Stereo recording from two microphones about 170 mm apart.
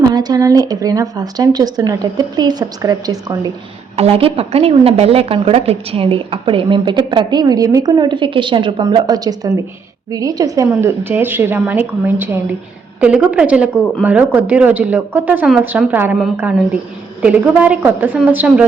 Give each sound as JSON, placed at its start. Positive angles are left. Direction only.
{"t": 0.1, "sound": "a woman's voice", "side_deg": -25}
{"t": 3.9, "sound": "a woman's voice", "side_deg": -35}
{"t": 17.2, "sound": "a woman's voice", "side_deg": -10}